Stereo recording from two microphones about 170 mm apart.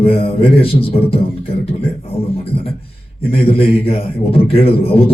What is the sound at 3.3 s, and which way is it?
Speech, 35° left (ahead or behind).